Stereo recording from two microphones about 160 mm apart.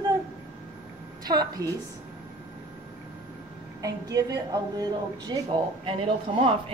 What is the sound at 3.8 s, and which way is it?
A woman's voice, 20° right (ahead or behind).